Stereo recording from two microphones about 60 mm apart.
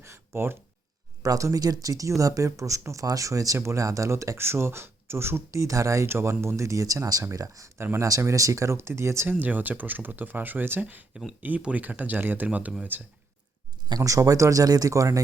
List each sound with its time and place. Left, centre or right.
0.0 s a sound: right
1.2 s speech: right
4.4 s speech: right
5.5 s speech: right
6.1 s speech: right
9.4 s speech: right
13.9 s speech: right